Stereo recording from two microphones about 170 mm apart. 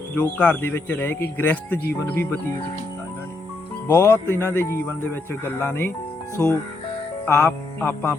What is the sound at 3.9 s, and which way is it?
Speech, 10° left (ahead or behind).